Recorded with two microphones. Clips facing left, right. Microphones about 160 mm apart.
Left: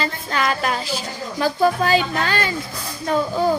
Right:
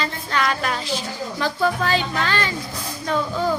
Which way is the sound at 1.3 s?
40° left (ahead or behind).